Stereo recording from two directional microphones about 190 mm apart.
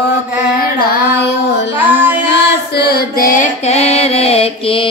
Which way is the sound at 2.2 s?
60° left (ahead or behind).